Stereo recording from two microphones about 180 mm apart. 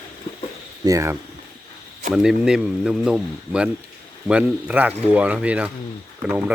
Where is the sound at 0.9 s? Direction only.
15° right (ahead or behind).